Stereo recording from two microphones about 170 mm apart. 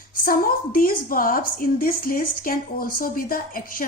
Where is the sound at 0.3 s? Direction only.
60° left (ahead or behind).